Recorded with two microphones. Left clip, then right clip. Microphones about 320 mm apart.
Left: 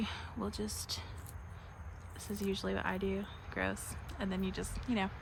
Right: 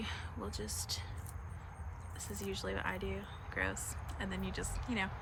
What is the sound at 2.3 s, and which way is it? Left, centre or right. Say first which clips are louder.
Speech: left 3 dB; centre.